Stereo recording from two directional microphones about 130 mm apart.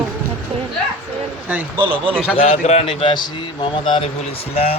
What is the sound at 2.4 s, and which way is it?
Speech, 55° left (ahead or behind).